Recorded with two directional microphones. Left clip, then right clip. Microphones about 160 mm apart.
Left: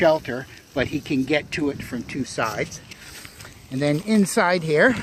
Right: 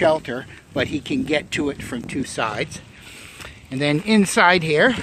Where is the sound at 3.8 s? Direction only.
35° right (ahead or behind).